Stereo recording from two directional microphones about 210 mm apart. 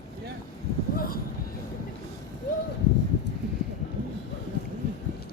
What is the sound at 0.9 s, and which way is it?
Vehicle, 45° left (ahead or behind).